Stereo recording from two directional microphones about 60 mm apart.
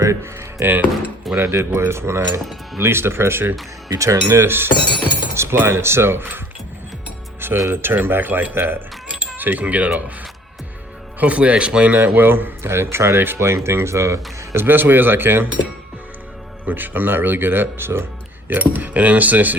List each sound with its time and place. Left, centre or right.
0.0 s speech: right
0.6 s a man's voice: right
3.9 s speech: right
4.4 s a man's voice: right
7.7 s a man's voice: right
11.2 s a man's voice: right
14.6 s a man's voice: right
16.6 s a man's voice: right
18.4 s speech: right